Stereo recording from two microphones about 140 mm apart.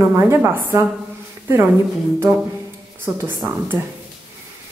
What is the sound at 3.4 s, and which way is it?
Speech, 25° right (ahead or behind).